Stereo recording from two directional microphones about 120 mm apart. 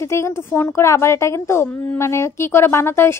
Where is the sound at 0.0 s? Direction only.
25° left (ahead or behind).